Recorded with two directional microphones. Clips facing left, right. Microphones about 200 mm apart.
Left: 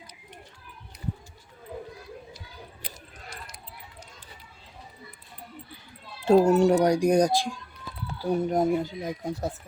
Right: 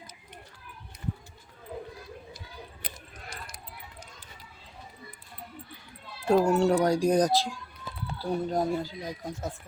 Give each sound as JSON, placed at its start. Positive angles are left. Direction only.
{"t": 6.2, "sound": "speech", "side_deg": 20}